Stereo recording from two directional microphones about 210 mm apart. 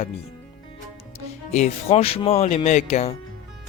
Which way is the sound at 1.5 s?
30° left (ahead or behind).